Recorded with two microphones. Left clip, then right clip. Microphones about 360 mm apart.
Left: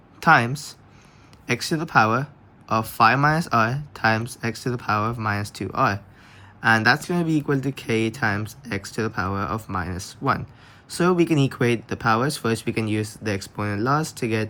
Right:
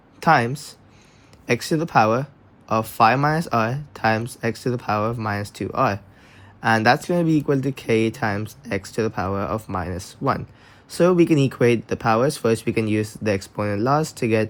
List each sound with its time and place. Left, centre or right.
0.2 s speech: centre